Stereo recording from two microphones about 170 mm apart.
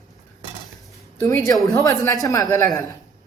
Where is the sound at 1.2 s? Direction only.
15° left (ahead or behind).